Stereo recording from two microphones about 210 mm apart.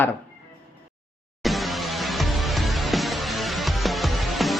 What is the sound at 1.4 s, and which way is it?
Music, centre (ahead or behind).